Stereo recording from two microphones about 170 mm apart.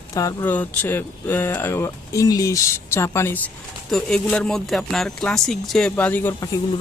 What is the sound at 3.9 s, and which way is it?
Speech, 5° left (ahead or behind).